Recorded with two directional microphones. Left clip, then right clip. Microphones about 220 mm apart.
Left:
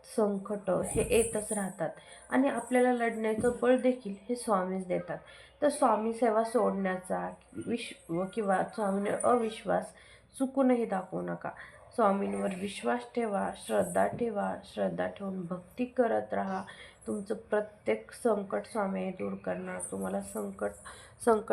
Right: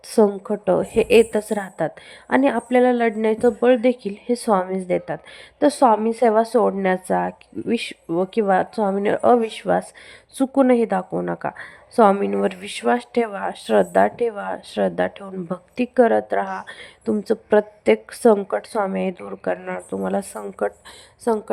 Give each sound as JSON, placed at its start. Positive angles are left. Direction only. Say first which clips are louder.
{"t": 0.1, "sound": "a woman's voice", "louder": "right 13 dB", "side_deg": -50}
{"t": 21.2, "sound": "a woman's voice", "louder": "right 5 dB", "side_deg": -20}